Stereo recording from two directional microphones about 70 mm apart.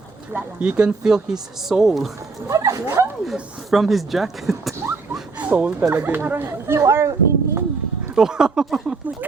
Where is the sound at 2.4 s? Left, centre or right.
Right.